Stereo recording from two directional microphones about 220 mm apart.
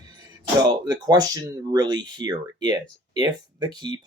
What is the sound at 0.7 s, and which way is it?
Speech, 20° right (ahead or behind).